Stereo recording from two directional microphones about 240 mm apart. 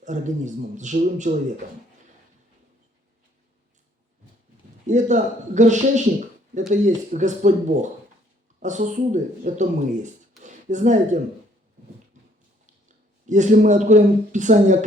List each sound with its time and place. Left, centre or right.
0.0 s a man's voice: right
4.9 s a man's voice: right
12.1 s a sound: right
13.2 s a man's voice: right